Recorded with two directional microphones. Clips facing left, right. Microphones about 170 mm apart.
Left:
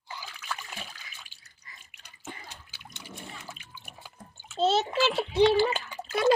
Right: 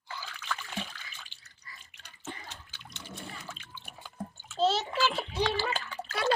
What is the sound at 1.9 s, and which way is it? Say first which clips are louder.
Water: right 1 dB; 10° left (ahead or behind).